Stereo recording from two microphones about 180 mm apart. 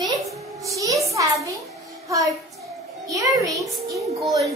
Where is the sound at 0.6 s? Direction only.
15° right (ahead or behind).